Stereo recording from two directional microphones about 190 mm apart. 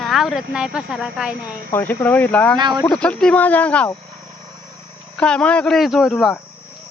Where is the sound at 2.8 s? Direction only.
5° left (ahead or behind).